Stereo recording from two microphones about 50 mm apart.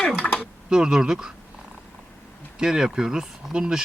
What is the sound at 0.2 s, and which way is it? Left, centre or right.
Typing, left.